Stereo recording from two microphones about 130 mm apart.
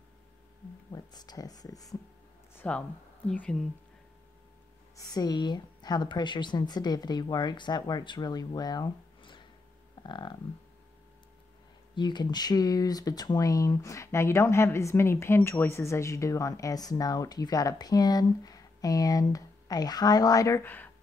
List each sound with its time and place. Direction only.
0.9 s speech: 30° left (ahead or behind)
2.5 s a sound: 15° left (ahead or behind)
3.3 s a woman's voice: 5° left (ahead or behind)
4.9 s speech: 30° left (ahead or behind)
11.9 s speech: 35° left (ahead or behind); by 20.9 s 15° left (ahead or behind)